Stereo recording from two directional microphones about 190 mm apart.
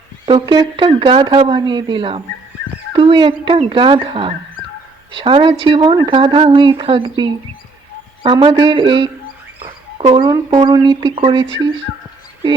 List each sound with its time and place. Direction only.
0.3 s a woman's voice: 25° right (ahead or behind)